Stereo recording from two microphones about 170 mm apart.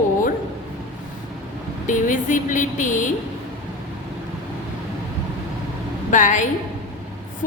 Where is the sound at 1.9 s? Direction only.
50° left (ahead or behind).